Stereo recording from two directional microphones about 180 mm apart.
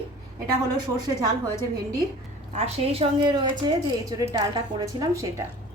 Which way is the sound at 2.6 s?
35° right (ahead or behind).